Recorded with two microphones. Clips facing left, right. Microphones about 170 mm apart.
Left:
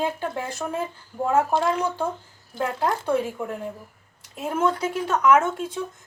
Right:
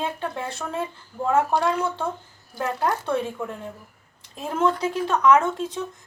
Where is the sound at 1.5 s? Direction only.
20° left (ahead or behind).